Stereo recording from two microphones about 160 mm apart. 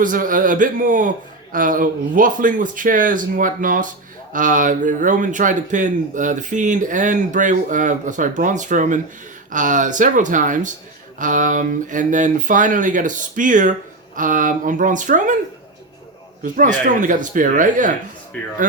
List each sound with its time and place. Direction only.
0.0 s speech: 60° right (ahead or behind)
16.4 s speech: 55° right (ahead or behind)
18.3 s speech: 5° left (ahead or behind)